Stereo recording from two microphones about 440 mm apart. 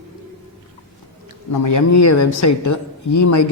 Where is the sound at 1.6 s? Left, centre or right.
Left.